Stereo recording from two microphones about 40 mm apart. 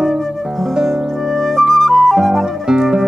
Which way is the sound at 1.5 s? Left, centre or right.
Centre.